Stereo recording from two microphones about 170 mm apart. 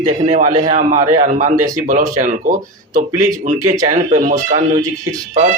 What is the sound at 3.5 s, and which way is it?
Speech, 20° right (ahead or behind).